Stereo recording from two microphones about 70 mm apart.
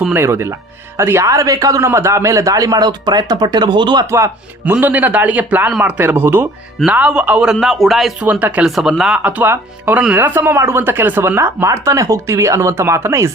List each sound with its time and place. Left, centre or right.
0.2 s a woman's voice: right
1.2 s speech: right
1.9 s speech: right
4.6 s a man's voice: right
6.8 s speech: centre
8.2 s a man's voice: right
8.6 s speech: centre
9.2 s a man's voice: right
11.3 s speech: right